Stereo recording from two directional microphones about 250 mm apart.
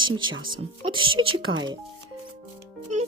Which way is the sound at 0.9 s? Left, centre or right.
Centre.